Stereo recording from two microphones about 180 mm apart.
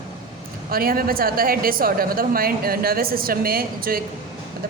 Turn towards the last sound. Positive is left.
turn(degrees=-55)  # may be behind; listen again after turning